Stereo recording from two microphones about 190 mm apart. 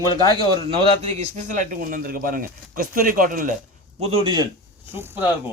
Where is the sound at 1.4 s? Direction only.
45° right (ahead or behind).